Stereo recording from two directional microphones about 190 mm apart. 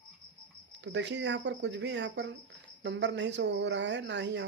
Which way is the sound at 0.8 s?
70° right (ahead or behind).